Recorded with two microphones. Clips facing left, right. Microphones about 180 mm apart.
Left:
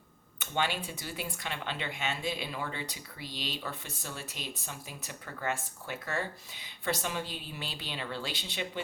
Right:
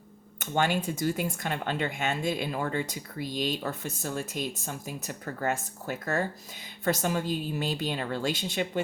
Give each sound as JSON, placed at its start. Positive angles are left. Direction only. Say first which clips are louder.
{"t": 0.3, "sound": "speech", "louder": "right 6 dB", "side_deg": -45}